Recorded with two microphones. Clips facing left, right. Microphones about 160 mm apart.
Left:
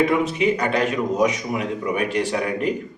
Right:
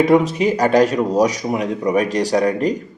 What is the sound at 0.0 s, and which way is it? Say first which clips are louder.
A man's voice: right 5 dB; 40° right (ahead or behind).